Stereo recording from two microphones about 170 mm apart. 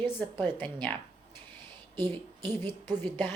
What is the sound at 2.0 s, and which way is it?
Speech, 30° right (ahead or behind).